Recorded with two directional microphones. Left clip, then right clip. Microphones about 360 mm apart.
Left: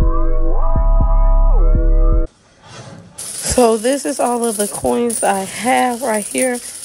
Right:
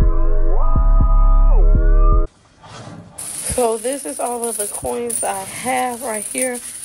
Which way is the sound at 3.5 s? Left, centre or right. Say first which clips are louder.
Left 6 dB; left.